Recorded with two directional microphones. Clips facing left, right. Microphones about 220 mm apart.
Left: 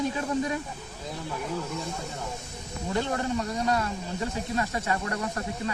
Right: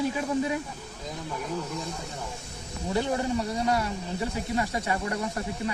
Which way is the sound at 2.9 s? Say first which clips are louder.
Right 1 dB; 10° right (ahead or behind).